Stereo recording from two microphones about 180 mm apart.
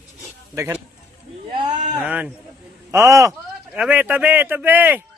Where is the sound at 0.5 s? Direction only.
15° right (ahead or behind).